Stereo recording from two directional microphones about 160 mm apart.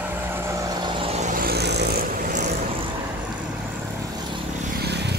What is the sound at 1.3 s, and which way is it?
Vehicle, 70° right (ahead or behind).